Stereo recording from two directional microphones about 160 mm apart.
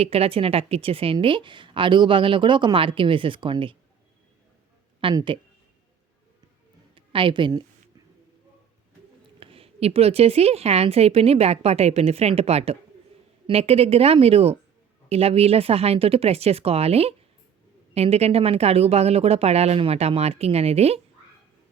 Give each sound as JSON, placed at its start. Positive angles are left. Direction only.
{"t": 0.0, "sound": "speech", "side_deg": -40}
{"t": 4.9, "sound": "speech", "side_deg": -30}
{"t": 6.9, "sound": "a woman's voice", "side_deg": -30}
{"t": 9.4, "sound": "speech", "side_deg": -35}